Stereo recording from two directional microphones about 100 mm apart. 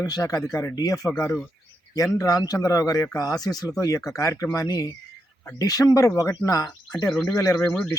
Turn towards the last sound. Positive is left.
turn(degrees=25)  # may be behind; listen again after turning